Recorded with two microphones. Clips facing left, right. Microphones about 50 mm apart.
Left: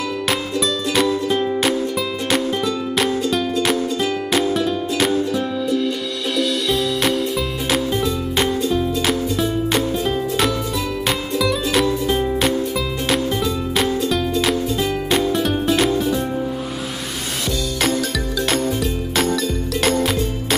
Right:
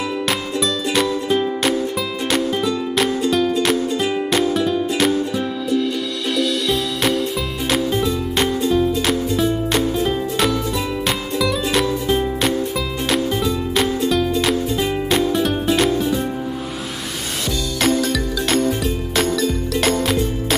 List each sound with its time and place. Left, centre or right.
0.3 s music: centre
3.9 s music: centre
4.3 s music: centre
17.7 s music: centre